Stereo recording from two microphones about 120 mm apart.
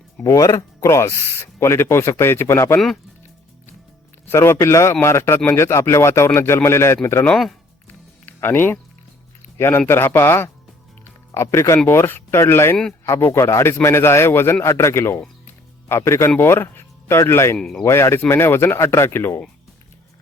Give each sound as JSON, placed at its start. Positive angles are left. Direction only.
{"t": 0.2, "sound": "speech", "side_deg": 25}
{"t": 4.3, "sound": "speech", "side_deg": 20}
{"t": 17.6, "sound": "speech", "side_deg": 5}
{"t": 17.8, "sound": "speech", "side_deg": 25}